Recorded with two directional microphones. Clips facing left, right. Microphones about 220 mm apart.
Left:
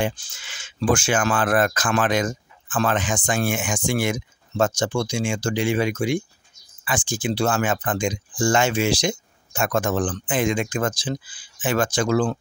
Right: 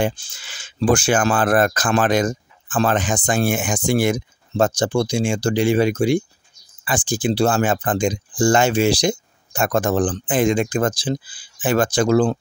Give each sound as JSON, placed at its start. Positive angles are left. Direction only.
{"t": 0.0, "sound": "speech", "side_deg": -30}